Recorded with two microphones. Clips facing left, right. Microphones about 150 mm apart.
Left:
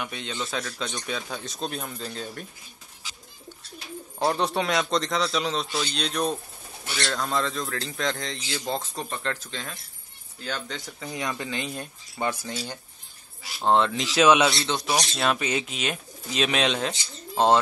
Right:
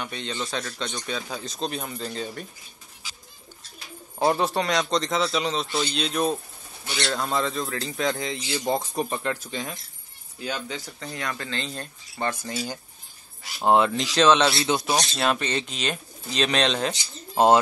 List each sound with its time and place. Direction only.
0.0 s speech: centre (ahead or behind)
4.2 s speech: 5° right (ahead or behind)
11.0 s speech: 15° left (ahead or behind)
12.4 s speech: 5° right (ahead or behind)
14.5 s speech: 10° right (ahead or behind)
15.1 s speech: centre (ahead or behind)